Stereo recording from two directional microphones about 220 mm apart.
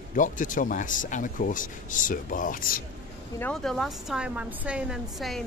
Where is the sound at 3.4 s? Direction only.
5° left (ahead or behind).